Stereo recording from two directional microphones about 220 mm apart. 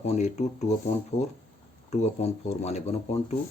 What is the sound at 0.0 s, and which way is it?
Speech, 30° left (ahead or behind).